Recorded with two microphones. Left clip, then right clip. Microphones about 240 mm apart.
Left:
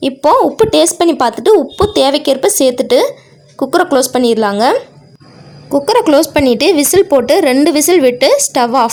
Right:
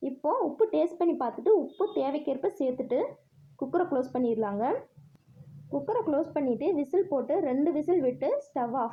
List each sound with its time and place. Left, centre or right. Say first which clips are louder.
0.0 s a woman's voice: left 19 dB; left
5.7 s a woman's voice: left 19 dB; left